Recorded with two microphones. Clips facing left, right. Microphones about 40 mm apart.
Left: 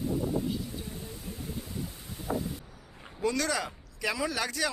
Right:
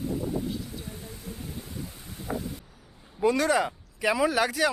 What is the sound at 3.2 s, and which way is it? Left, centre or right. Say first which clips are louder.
Speech: right 6 dB; right.